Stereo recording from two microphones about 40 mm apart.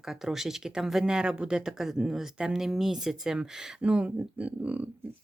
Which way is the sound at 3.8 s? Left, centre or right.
Right.